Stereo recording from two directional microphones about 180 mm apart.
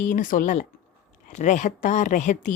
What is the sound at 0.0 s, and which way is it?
Speech, 45° left (ahead or behind).